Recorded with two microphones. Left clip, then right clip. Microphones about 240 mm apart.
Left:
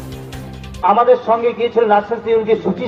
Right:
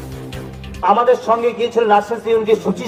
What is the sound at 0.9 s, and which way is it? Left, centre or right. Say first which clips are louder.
A man's voice: left 1 dB; right.